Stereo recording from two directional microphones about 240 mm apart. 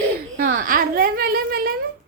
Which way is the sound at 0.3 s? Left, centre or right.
Right.